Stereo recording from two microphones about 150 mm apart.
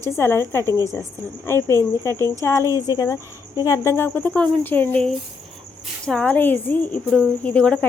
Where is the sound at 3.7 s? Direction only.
15° left (ahead or behind).